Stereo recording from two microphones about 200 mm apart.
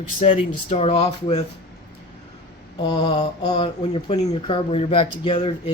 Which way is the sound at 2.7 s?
20° left (ahead or behind).